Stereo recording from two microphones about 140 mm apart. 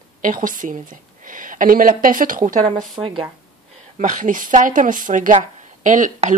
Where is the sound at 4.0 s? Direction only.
70° right (ahead or behind).